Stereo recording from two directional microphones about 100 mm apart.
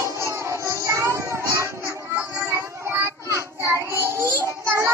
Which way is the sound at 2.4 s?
30° right (ahead or behind).